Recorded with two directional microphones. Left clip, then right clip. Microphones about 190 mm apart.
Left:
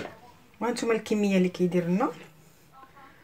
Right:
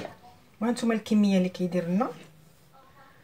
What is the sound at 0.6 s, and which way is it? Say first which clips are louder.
Speech: left 2 dB; 45° left (ahead or behind).